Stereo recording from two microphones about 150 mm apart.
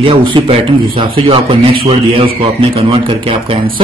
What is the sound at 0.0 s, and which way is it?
A man's voice, 35° right (ahead or behind).